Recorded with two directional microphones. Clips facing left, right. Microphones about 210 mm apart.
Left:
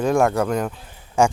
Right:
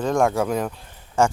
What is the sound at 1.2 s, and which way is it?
Speech, 15° left (ahead or behind).